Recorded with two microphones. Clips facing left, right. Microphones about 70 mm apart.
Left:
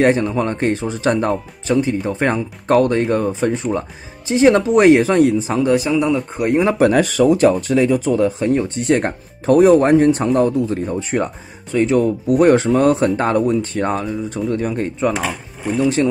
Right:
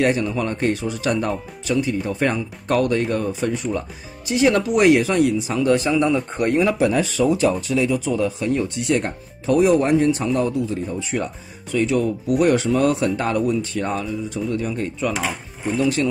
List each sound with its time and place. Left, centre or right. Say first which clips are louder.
0.0 s speech: left 5 dB; left
5.8 s a man's voice: left 2 dB; centre
6.5 s speech: left 3 dB; left
6.8 s speech: left 5 dB; left